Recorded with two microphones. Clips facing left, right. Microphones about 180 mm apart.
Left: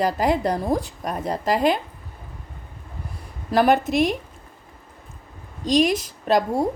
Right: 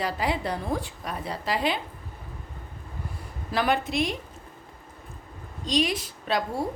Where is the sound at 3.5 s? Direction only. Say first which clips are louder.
Left 7 dB; 45° left (ahead or behind).